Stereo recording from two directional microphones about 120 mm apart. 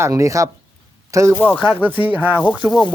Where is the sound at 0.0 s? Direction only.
25° right (ahead or behind).